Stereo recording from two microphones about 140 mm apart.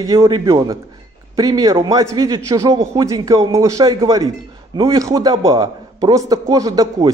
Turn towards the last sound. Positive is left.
turn(degrees=-25)  # may be behind; listen again after turning